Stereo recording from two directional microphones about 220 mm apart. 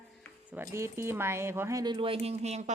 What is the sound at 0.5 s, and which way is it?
Speech, 10° right (ahead or behind).